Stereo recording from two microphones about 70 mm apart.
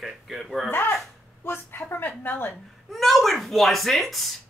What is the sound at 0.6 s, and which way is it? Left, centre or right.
A woman's voice, left.